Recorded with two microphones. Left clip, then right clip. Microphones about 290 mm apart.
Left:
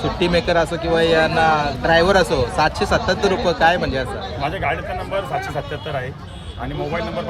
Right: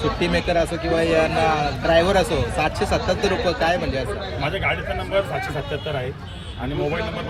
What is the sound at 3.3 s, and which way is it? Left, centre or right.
Speech, centre.